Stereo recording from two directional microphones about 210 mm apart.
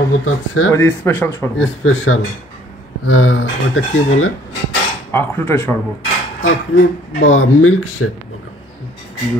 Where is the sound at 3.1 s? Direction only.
65° left (ahead or behind).